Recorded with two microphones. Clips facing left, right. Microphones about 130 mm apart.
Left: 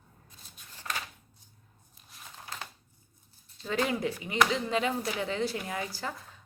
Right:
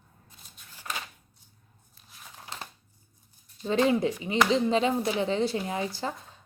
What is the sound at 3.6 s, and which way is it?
Speech, 25° right (ahead or behind).